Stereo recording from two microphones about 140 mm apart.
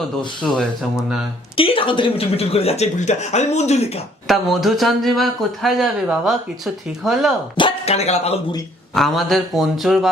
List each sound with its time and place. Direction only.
0.4 s speech: centre (ahead or behind)
1.5 s speech: 40° left (ahead or behind)
4.3 s speech: centre (ahead or behind)
7.5 s a sound: 35° left (ahead or behind)
7.9 s speech: 50° left (ahead or behind)
9.0 s speech: centre (ahead or behind)